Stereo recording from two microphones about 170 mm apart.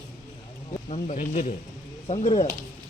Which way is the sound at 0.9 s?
50° left (ahead or behind).